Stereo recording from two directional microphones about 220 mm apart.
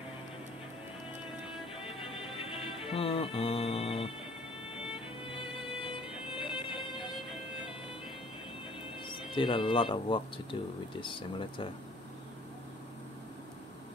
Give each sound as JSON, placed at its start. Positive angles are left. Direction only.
{"t": 2.0, "sound": "music", "side_deg": 25}
{"t": 5.3, "sound": "music", "side_deg": 25}
{"t": 9.0, "sound": "speech", "side_deg": 20}